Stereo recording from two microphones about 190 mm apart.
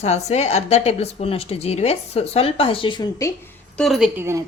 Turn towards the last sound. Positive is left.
turn(degrees=-15)  # may be behind; listen again after turning